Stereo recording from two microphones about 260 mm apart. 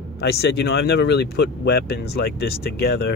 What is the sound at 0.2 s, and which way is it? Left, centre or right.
Speech, left.